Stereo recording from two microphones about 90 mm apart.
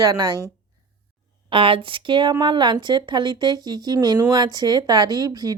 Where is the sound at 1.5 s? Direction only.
80° right.